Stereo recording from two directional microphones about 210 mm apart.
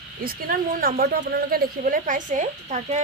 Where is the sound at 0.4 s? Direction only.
45° right (ahead or behind).